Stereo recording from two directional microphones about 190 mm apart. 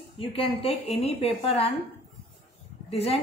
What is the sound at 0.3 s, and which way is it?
Speech, 30° left (ahead or behind).